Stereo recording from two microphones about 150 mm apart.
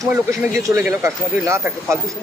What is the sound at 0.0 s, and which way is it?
Speech, 20° right (ahead or behind).